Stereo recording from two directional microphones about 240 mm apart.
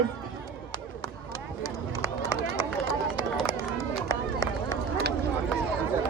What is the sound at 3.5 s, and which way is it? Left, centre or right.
Run, centre.